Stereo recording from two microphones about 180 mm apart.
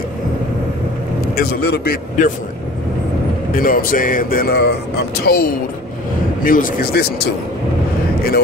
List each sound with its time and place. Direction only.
1.3 s a man's voice: 60° left (ahead or behind)
3.5 s speech: 50° left (ahead or behind)